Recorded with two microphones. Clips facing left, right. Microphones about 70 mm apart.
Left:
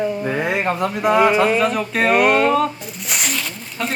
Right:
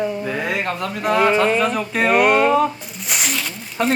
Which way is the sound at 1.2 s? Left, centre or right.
Centre.